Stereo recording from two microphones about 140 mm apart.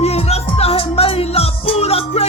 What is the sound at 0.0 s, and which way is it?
Music, 50° left (ahead or behind).